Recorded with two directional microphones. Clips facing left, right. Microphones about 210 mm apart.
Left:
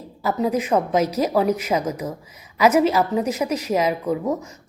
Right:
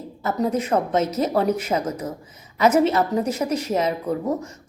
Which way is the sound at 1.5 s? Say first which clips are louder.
Left 1 dB; 30° right (ahead or behind).